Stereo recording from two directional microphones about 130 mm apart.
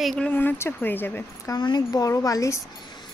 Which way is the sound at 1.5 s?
35° left (ahead or behind).